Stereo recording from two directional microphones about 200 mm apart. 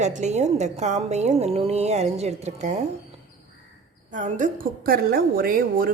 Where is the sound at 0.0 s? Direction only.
35° right (ahead or behind).